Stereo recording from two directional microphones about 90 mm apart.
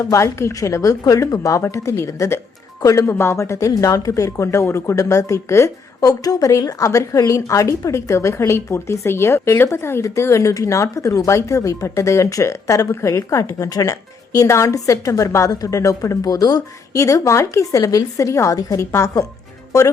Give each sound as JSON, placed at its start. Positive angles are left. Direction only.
{"t": 0.0, "sound": "speech", "side_deg": 35}
{"t": 17.0, "sound": "speech", "side_deg": 35}